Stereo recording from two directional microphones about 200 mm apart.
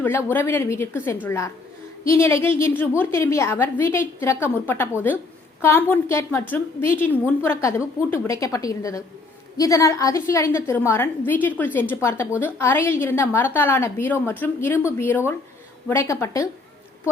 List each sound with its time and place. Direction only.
0.3 s a woman's voice: 10° left (ahead or behind)